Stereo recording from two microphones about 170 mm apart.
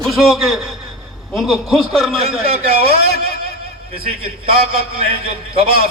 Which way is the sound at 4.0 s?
35° right (ahead or behind).